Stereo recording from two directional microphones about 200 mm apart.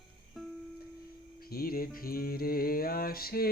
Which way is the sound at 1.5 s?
45° left (ahead or behind).